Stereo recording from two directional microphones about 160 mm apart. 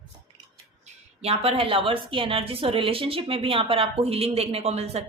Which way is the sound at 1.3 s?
35° right (ahead or behind).